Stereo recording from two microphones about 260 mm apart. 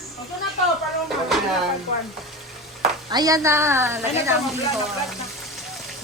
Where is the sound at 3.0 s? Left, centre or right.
Centre.